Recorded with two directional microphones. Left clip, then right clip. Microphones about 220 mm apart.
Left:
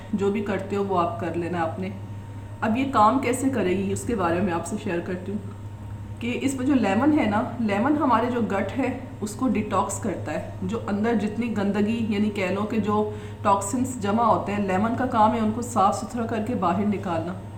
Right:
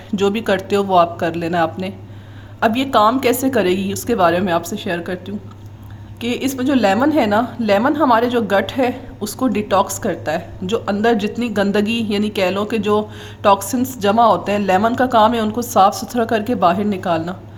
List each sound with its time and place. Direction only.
0.2 s a woman's voice: 45° right (ahead or behind)
6.1 s a woman's voice: 40° right (ahead or behind)